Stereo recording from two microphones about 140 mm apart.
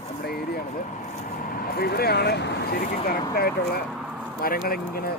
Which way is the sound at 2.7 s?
90° left.